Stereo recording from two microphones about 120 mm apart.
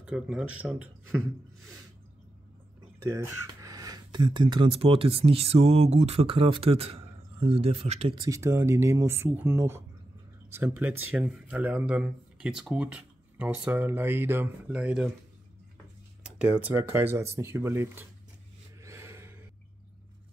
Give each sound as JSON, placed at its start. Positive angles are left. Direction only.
{"t": 0.0, "sound": "speech", "side_deg": -10}
{"t": 3.0, "sound": "speech", "side_deg": -20}
{"t": 4.6, "sound": "speech", "side_deg": -55}
{"t": 8.1, "sound": "speech", "side_deg": -30}
{"t": 11.1, "sound": "speech", "side_deg": -5}
{"t": 16.2, "sound": "speech", "side_deg": -5}
{"t": 18.8, "sound": "a sound", "side_deg": -25}